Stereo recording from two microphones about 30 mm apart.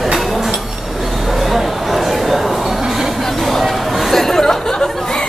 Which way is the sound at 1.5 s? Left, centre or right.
Centre.